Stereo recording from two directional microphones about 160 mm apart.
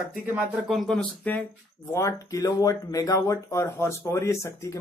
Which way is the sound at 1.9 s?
20° left (ahead or behind).